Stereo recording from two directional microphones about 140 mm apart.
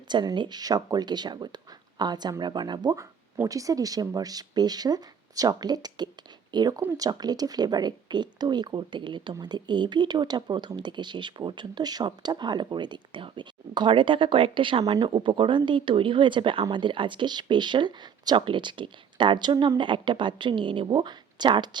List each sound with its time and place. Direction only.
0.1 s speech: 30° right (ahead or behind)